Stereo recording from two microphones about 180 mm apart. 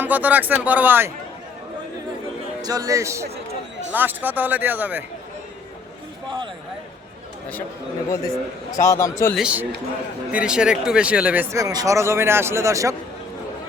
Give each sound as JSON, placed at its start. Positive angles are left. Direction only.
{"t": 0.0, "sound": "a man's voice", "side_deg": -10}
{"t": 2.6, "sound": "a man's voice", "side_deg": -20}
{"t": 6.2, "sound": "a sound", "side_deg": -30}
{"t": 8.7, "sound": "a man's voice", "side_deg": 15}
{"t": 9.3, "sound": "speech", "side_deg": -5}
{"t": 11.5, "sound": "a man's voice", "side_deg": -20}